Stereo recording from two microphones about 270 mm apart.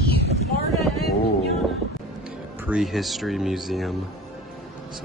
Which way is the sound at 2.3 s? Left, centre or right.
Centre.